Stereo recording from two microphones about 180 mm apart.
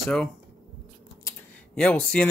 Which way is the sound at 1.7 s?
5° left (ahead or behind).